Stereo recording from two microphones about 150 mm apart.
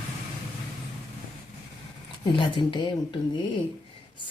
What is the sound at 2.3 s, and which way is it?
Speech, 35° left (ahead or behind).